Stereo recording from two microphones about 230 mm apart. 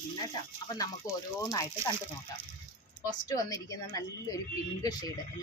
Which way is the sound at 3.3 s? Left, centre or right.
Centre.